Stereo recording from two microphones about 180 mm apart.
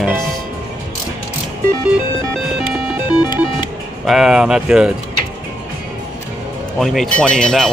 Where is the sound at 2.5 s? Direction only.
5° right (ahead or behind).